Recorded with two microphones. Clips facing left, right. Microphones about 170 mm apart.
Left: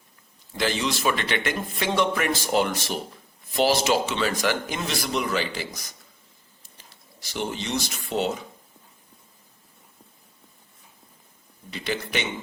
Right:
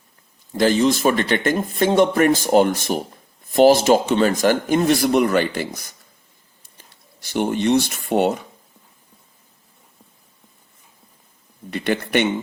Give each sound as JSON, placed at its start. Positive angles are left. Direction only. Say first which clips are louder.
{"t": 0.5, "sound": "speech", "louder": "right 9 dB", "side_deg": -45}
{"t": 7.2, "sound": "speech", "louder": "right 9 dB", "side_deg": -55}
{"t": 11.7, "sound": "speech", "louder": "right 8 dB", "side_deg": -60}